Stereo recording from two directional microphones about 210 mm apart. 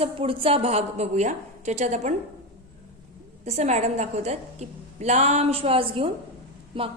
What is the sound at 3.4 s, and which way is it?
A woman's voice, 30° right (ahead or behind).